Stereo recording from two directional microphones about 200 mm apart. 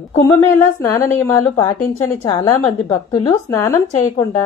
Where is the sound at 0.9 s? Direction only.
10° left (ahead or behind).